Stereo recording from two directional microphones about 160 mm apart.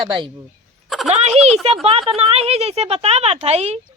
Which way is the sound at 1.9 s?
35° right (ahead or behind).